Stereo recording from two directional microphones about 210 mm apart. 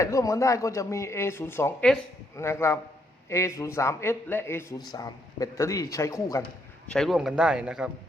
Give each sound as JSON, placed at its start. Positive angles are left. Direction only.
{"t": 0.0, "sound": "speech", "side_deg": 15}
{"t": 6.8, "sound": "speech", "side_deg": 5}